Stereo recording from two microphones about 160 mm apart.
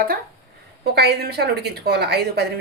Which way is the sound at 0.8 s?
90° right.